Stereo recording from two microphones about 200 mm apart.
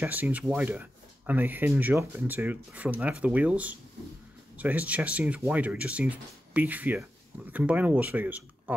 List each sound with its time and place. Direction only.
0.0 s speech: 10° right (ahead or behind)